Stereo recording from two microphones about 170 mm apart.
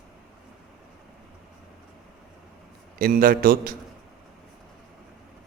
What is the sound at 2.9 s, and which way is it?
Speech, 55° right (ahead or behind).